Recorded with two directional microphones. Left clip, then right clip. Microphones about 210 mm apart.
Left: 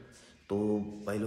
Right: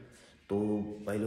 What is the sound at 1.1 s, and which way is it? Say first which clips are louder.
Speech: even; 5° left (ahead or behind).